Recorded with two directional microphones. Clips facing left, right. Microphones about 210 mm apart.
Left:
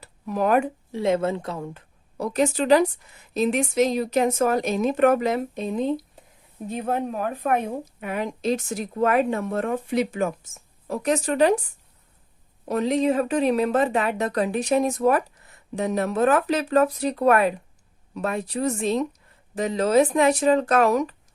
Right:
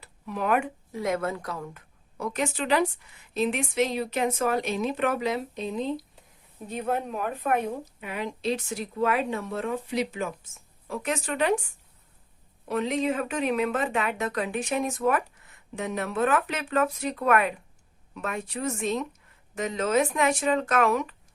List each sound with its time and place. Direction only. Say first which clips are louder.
0.0 s speech: left 6 dB; 40° left (ahead or behind)
12.6 s speech: left 5 dB; 40° left (ahead or behind)